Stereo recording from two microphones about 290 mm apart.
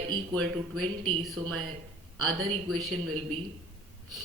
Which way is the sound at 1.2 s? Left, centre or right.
Centre.